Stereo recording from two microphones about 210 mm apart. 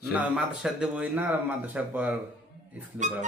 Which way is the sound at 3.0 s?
35° right (ahead or behind).